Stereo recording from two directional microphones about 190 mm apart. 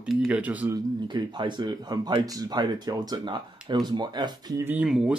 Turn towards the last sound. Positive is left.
turn(degrees=0)  # may be behind; listen again after turning